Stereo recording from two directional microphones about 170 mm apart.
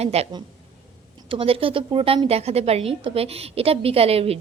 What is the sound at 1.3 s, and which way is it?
A woman's voice, 35° right (ahead or behind).